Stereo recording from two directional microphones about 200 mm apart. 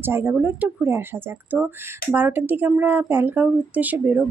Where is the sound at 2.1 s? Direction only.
10° right (ahead or behind).